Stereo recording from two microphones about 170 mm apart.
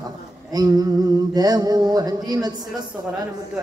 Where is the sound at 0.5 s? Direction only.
25° right (ahead or behind).